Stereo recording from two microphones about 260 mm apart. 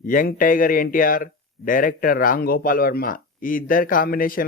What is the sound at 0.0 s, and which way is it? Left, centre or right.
A man's voice, left.